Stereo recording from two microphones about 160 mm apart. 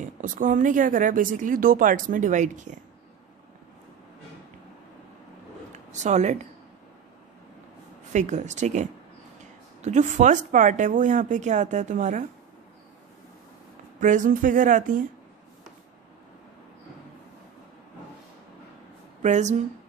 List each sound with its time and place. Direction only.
0.0 s speech: 55° right (ahead or behind)
5.7 s speech: 45° right (ahead or behind)
8.1 s a woman's voice: 50° right (ahead or behind)
13.9 s speech: 50° right (ahead or behind)
19.2 s a woman's voice: 50° right (ahead or behind)